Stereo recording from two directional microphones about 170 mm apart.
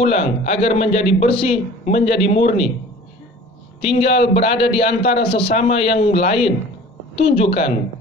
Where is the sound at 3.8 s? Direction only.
35° left (ahead or behind).